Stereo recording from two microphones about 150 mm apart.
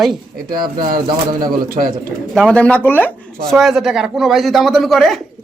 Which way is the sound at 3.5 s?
Centre (ahead or behind).